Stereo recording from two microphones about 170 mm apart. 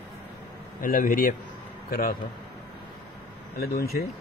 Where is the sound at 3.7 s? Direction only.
65° left (ahead or behind).